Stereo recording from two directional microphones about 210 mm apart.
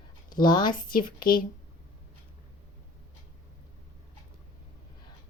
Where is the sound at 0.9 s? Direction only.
40° left (ahead or behind).